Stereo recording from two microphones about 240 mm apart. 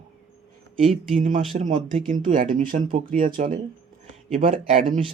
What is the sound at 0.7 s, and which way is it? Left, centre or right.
Speech, centre.